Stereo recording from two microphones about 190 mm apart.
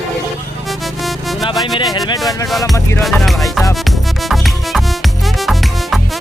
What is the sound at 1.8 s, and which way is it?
Speech, 20° left (ahead or behind).